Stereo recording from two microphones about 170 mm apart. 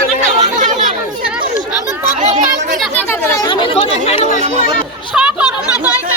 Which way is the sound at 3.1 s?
20° left (ahead or behind).